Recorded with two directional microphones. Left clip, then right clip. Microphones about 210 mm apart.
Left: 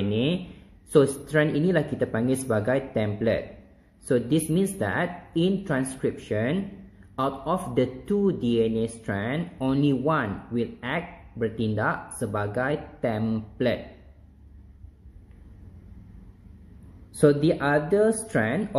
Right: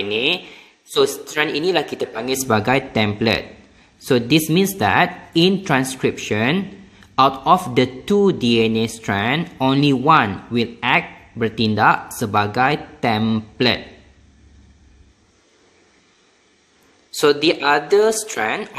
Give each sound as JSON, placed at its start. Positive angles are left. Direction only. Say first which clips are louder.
{"t": 0.1, "sound": "a man's voice", "louder": "right 8 dB", "side_deg": -40}
{"t": 17.2, "sound": "speech", "louder": "right 5 dB", "side_deg": -40}